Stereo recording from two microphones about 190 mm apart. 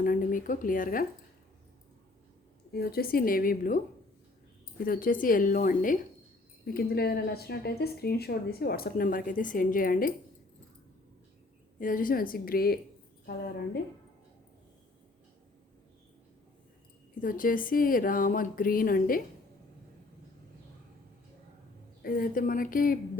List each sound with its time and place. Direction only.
0.0 s speech: 45° left (ahead or behind)
2.7 s speech: 55° left (ahead or behind)
4.8 s speech: 50° left (ahead or behind)
6.7 s speech: 55° left (ahead or behind)
11.8 s speech: 45° left (ahead or behind)
17.2 s speech: 45° left (ahead or behind)
22.0 s speech: 50° left (ahead or behind)